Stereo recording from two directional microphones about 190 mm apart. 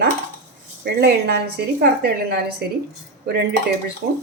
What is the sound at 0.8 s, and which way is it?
Speech, 60° right (ahead or behind).